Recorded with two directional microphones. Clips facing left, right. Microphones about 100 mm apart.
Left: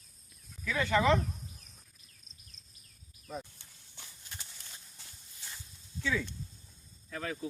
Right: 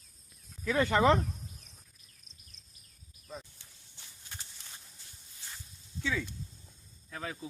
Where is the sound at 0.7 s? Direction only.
40° right (ahead or behind).